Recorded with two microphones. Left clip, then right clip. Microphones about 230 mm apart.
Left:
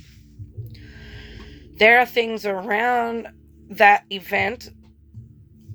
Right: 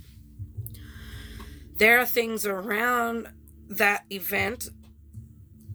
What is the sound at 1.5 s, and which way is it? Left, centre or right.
A woman's voice, right.